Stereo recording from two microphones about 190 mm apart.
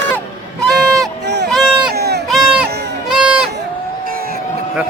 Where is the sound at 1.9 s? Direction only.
55° right (ahead or behind).